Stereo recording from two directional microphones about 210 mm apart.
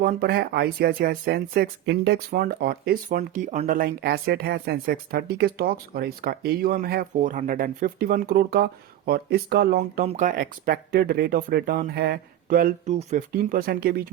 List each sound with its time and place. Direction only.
0.0 s speech: 45° right (ahead or behind)